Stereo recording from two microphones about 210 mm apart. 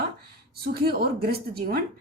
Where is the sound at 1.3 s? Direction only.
45° right (ahead or behind).